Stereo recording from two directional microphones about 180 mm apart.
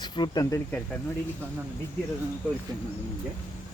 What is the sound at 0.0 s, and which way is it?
Speech, 25° left (ahead or behind).